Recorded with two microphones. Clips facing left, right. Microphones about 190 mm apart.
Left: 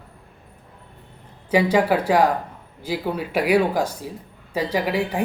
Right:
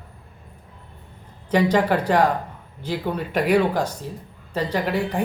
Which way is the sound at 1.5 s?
5° left (ahead or behind).